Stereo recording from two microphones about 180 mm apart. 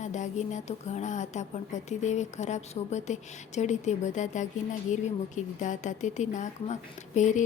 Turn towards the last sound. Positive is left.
turn(degrees=40)  # may be behind; listen again after turning